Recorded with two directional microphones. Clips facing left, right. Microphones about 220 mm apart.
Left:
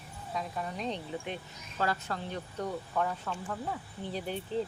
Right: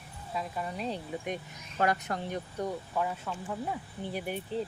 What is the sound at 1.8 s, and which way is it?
Speech, 20° right (ahead or behind).